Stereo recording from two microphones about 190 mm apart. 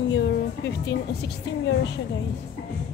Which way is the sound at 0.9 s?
65° left (ahead or behind).